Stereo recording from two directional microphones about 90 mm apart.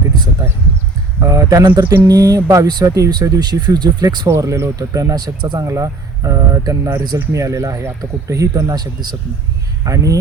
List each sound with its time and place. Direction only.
1.2 s speech: 40° right (ahead or behind)
4.3 s speech: 35° right (ahead or behind)
5.6 s speech: 35° right (ahead or behind)
8.7 s speech: 50° right (ahead or behind)
9.8 s speech: 40° right (ahead or behind)